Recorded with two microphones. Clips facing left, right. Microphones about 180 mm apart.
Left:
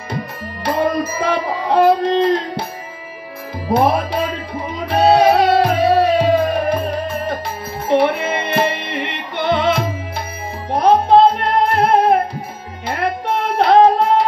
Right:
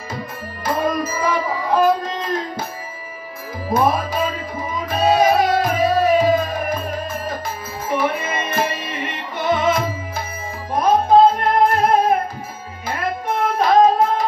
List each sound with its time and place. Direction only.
0.7 s music: 70° left (ahead or behind)
3.7 s music: 70° left (ahead or behind)